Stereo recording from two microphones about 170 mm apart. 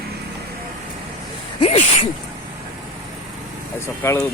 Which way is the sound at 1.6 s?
40° left (ahead or behind).